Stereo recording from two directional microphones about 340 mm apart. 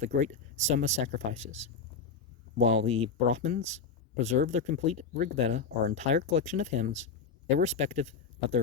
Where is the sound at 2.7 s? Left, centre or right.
Centre.